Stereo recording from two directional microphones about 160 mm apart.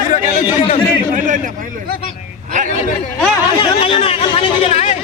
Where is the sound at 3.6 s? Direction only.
35° left (ahead or behind).